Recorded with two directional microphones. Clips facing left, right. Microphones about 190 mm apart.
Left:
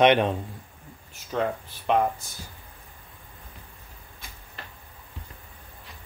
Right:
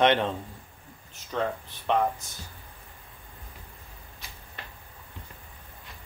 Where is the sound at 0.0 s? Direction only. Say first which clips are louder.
Left 4 dB; 15° left (ahead or behind).